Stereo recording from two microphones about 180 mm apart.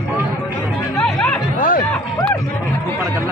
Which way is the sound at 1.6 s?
50° left (ahead or behind).